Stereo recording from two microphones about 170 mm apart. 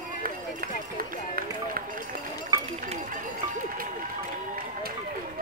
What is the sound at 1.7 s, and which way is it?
Run, 55° right (ahead or behind).